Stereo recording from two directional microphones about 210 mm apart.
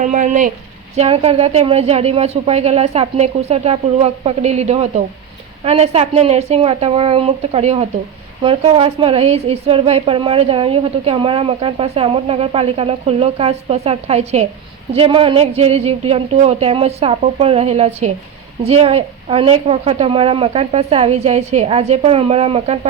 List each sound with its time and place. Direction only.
0.0 s a woman's voice: 40° right (ahead or behind)